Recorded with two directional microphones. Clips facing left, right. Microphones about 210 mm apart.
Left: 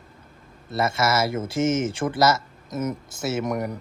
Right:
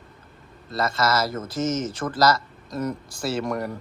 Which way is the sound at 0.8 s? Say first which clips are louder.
Left 1 dB; 25° left (ahead or behind).